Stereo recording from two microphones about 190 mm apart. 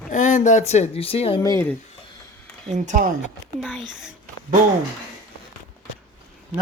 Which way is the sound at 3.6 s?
Centre (ahead or behind).